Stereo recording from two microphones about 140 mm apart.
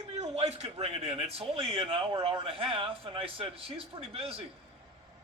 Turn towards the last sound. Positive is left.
turn(degrees=-40)  # may be behind; listen again after turning